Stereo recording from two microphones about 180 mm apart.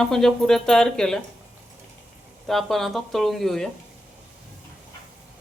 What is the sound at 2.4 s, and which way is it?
Speech, centre (ahead or behind).